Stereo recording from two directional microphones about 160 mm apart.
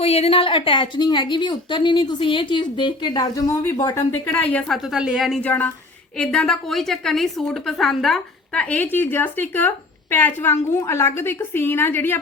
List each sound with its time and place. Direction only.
0.0 s a woman's voice: 40° left (ahead or behind); by 4.8 s 10° left (ahead or behind)
4.8 s a woman's voice: 5° right (ahead or behind)
5.5 s a woman's voice: 10° left (ahead or behind)